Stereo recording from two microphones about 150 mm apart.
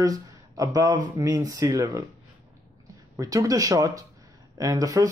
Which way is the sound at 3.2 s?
25° right (ahead or behind).